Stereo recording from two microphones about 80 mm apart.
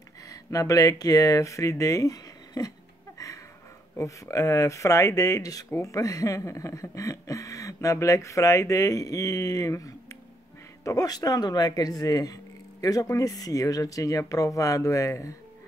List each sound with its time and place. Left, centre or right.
0.3 s speech: left
4.0 s speech: left